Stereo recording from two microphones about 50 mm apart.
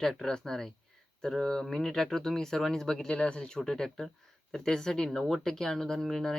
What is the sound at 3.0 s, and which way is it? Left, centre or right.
Speech, centre.